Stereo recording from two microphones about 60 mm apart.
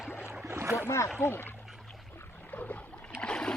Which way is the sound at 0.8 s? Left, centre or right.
Left.